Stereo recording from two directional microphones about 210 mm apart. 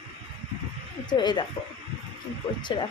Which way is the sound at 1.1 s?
20° left (ahead or behind).